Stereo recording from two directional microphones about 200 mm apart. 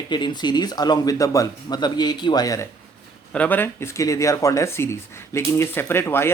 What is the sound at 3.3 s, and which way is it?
Speech, 5° left (ahead or behind).